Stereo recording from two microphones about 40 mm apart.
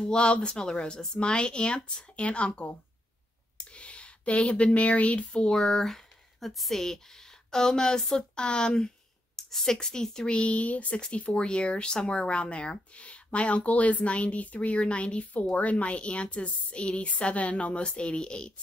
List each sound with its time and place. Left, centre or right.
0.0 s speech: left
9.4 s speech: centre
10.3 s speech: left